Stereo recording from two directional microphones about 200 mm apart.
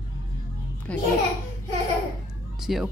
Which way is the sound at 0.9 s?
5° left (ahead or behind).